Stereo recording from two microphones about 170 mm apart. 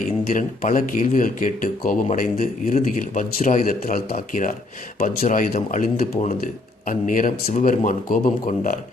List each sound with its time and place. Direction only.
0.3 s speech: 55° left (ahead or behind)